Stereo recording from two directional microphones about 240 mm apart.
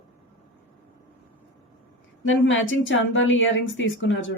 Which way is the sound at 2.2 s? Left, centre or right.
Left.